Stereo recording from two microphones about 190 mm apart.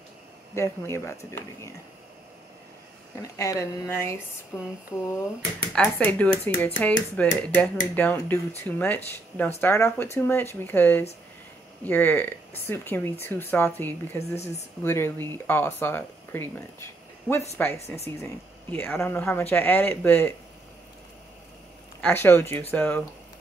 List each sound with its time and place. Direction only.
0.6 s speech: 15° left (ahead or behind)
3.2 s speech: 15° left (ahead or behind)
4.5 s a sound: 5° right (ahead or behind)
5.7 s speech: 5° left (ahead or behind)
17.3 s a sound: 5° right (ahead or behind)
17.9 s speech: 10° left (ahead or behind)
22.0 s speech: 10° left (ahead or behind)